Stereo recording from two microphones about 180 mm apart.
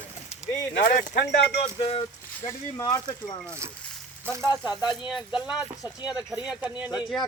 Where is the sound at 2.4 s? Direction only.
15° left (ahead or behind).